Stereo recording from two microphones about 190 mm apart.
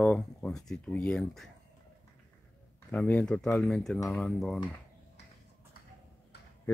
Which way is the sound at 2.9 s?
5° left (ahead or behind).